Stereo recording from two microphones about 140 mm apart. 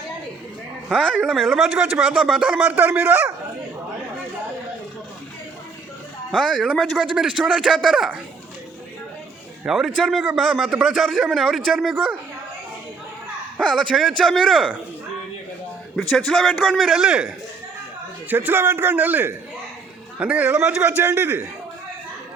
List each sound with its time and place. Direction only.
0.9 s speech: 5° left (ahead or behind); by 3.3 s 15° right (ahead or behind)
6.3 s speech: centre (ahead or behind)
9.6 s speech: centre (ahead or behind)
13.6 s speech: 5° left (ahead or behind)
16.0 s speech: 5° left (ahead or behind)
18.3 s a man's voice: 15° right (ahead or behind)